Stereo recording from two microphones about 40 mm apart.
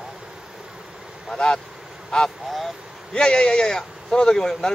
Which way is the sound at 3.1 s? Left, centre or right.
Left.